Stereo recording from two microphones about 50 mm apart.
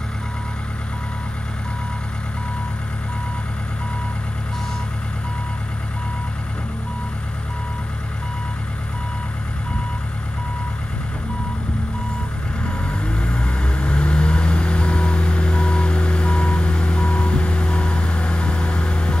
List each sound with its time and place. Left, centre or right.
12.8 s vehicle: left